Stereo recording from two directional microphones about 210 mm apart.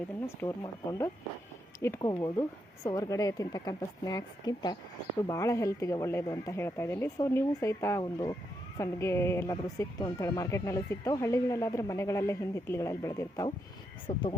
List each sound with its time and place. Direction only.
0.3 s a woman's voice: 15° left (ahead or behind)